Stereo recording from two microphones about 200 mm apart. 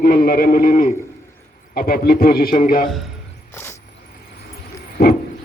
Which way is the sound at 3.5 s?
10° left (ahead or behind).